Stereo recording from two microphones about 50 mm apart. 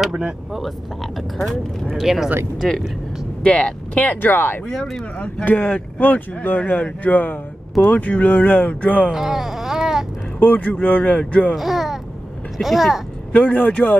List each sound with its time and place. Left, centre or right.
2.0 s speech: centre
3.4 s speech: left
4.6 s speech: centre
5.4 s speech: left
9.1 s baby cry: centre
10.4 s speech: left
11.5 s speech: centre
13.3 s speech: left